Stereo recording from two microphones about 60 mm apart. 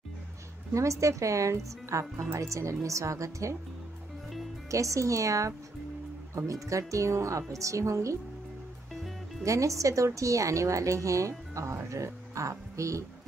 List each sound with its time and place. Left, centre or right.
0.7 s a woman's voice: right
4.6 s a woman's voice: right
9.4 s a woman's voice: right